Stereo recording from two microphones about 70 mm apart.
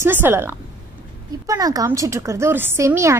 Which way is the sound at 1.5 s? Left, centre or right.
Right.